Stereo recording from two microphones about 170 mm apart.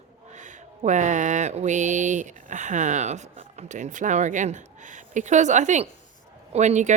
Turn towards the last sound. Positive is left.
turn(degrees=-45)  # may be behind; listen again after turning